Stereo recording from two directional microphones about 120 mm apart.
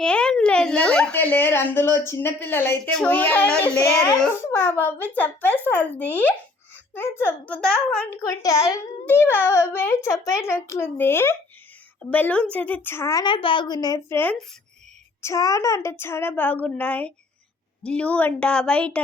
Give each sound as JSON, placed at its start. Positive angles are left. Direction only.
{"t": 0.0, "sound": "speech", "side_deg": 5}
{"t": 8.2, "sound": "a child's voice", "side_deg": 30}
{"t": 9.0, "sound": "a child's voice", "side_deg": 20}
{"t": 13.2, "sound": "a woman's voice", "side_deg": 45}
{"t": 14.1, "sound": "a child's voice", "side_deg": 15}